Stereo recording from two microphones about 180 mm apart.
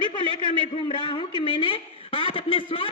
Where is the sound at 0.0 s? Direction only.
25° left (ahead or behind).